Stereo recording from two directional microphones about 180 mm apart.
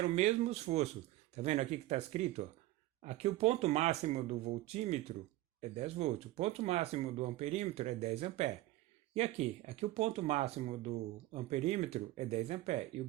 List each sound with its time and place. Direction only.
0.0 s speech: 40° right (ahead or behind)